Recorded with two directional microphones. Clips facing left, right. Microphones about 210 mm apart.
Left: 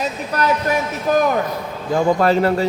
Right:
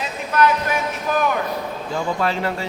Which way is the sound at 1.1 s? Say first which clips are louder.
Left 5 dB; 40° left (ahead or behind).